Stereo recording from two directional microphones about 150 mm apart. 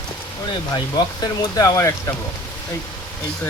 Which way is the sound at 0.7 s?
25° left (ahead or behind).